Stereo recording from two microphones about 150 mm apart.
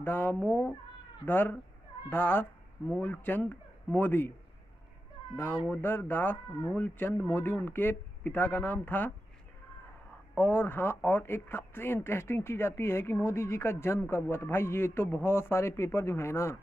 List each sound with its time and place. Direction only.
0.0 s speech: 15° left (ahead or behind)
5.3 s speech: 15° left (ahead or behind)
10.3 s speech: 15° left (ahead or behind)